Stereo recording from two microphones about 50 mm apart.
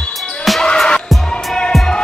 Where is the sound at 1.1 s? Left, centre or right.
Centre.